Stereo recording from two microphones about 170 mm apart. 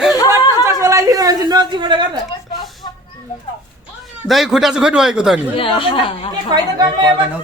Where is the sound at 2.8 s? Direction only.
30° left (ahead or behind).